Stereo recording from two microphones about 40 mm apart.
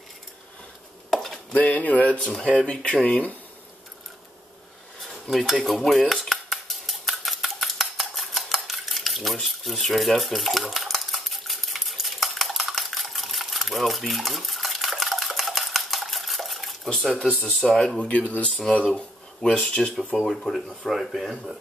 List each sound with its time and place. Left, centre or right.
1.1 s a sound: centre
1.5 s speech: left
2.1 s speech: left
5.0 s stir: centre
5.7 s cutlery: centre
7.7 s stir: centre
17.4 s speech: left
17.6 s speech: centre
17.9 s speech: left
18.9 s speech: left
20.2 s speech: centre